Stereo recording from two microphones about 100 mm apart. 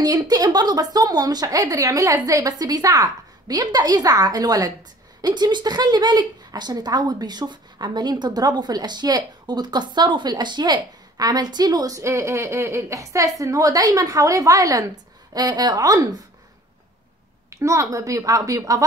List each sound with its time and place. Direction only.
0.0 s a woman's voice: 40° right (ahead or behind)
17.5 s a woman's voice: 30° right (ahead or behind)